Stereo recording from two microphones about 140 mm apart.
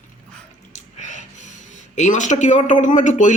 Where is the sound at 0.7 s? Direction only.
60° left (ahead or behind).